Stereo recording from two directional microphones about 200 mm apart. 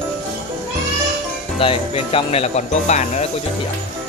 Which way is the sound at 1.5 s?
30° left (ahead or behind).